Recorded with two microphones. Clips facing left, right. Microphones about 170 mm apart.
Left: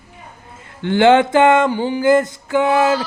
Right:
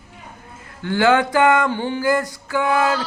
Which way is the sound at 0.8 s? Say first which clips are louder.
Left 5 dB; 25° left (ahead or behind).